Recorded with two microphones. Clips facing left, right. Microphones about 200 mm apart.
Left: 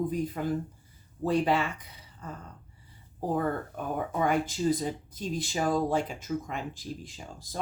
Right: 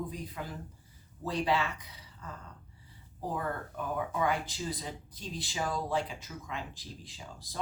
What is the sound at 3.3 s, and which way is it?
Speech, 50° left (ahead or behind).